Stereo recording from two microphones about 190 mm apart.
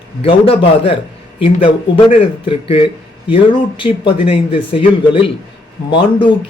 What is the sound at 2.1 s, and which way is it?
A man's voice, 30° left (ahead or behind).